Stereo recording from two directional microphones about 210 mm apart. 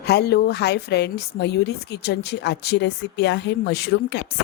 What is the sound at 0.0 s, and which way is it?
A woman's voice, 50° left (ahead or behind).